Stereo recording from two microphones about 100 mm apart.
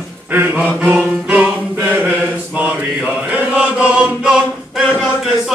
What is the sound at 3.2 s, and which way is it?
Chant, 15° right (ahead or behind).